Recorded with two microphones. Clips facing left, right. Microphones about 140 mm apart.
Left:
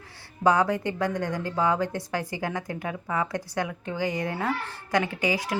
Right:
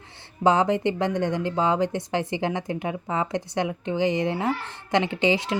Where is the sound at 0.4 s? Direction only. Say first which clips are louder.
Right 2 dB; 20° right (ahead or behind).